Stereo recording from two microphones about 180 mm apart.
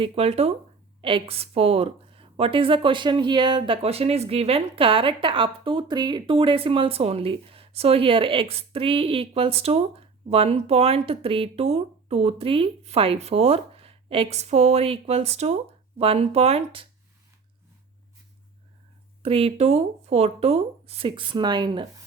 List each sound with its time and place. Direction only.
0.0 s a woman's voice: 35° right (ahead or behind)
19.2 s a woman's voice: 30° right (ahead or behind)